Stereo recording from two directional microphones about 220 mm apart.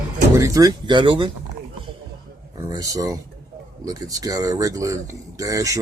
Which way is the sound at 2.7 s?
15° right (ahead or behind).